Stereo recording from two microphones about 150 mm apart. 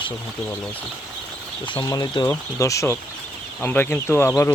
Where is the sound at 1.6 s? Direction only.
30° left (ahead or behind).